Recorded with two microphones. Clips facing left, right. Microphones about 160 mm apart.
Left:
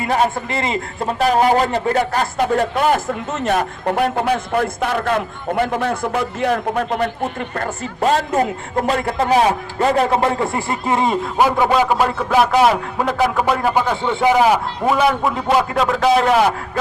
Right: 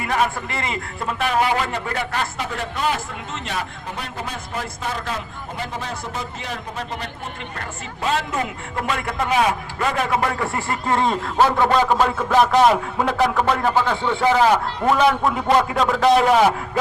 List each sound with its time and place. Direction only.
0.0 s a man's voice: 30° left (ahead or behind); by 3.7 s 45° left (ahead or behind)
3.8 s a man's voice: 70° left (ahead or behind)
7.5 s a man's voice: 45° left (ahead or behind); by 16.6 s centre (ahead or behind)